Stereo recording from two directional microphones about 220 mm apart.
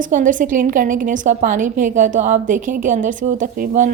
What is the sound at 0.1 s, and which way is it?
A woman's voice, 35° right (ahead or behind).